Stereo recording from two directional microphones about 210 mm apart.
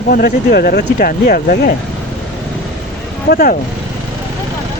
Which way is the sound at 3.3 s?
45° left (ahead or behind).